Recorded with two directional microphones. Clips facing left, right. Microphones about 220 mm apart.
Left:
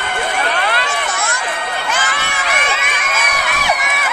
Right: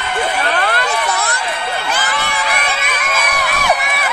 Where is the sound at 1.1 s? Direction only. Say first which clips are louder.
Right 2 dB; 35° right (ahead or behind).